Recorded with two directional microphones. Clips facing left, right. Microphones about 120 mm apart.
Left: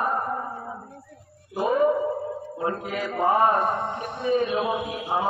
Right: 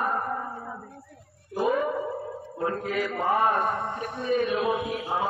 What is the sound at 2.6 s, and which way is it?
Speech, 15° left (ahead or behind).